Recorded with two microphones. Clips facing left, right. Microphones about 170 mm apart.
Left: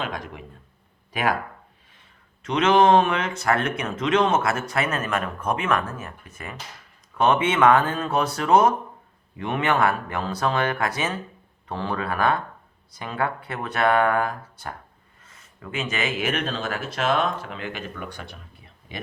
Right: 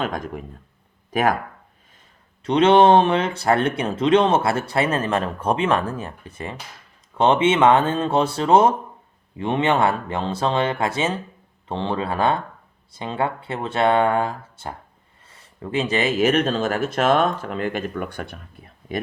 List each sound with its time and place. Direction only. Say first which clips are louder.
0.0 s speech: right 5 dB; 45° right (ahead or behind)
2.4 s speech: right 4 dB; 30° right (ahead or behind); by 18.9 s 50° right (ahead or behind)